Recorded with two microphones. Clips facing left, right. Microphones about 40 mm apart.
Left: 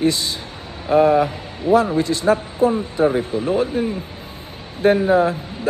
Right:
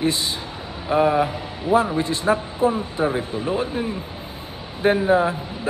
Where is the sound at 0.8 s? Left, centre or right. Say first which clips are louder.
Left 4 dB; centre.